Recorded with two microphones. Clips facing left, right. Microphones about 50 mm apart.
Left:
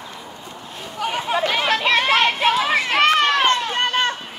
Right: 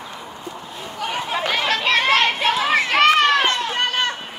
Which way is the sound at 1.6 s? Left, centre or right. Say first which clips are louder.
Right 1 dB; left.